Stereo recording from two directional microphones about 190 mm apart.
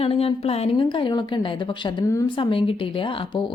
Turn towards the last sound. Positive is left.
turn(degrees=25)  # may be behind; listen again after turning